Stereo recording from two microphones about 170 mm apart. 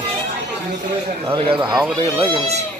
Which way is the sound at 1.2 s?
30° right (ahead or behind).